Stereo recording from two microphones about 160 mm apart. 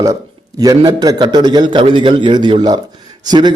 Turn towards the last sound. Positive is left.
turn(degrees=-25)  # may be behind; listen again after turning